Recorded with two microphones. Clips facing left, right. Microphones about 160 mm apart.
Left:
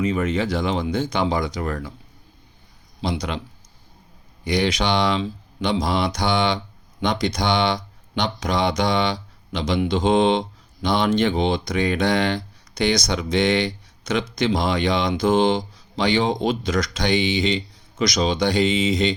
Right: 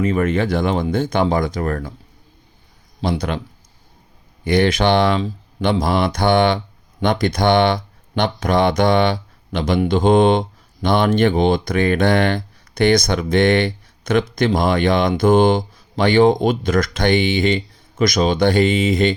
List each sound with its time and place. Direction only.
0.0 s speech: 55° right (ahead or behind)
3.0 s speech: 55° right (ahead or behind)
4.4 s speech: 55° right (ahead or behind)